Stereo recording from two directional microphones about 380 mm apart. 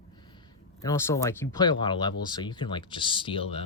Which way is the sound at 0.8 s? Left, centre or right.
Centre.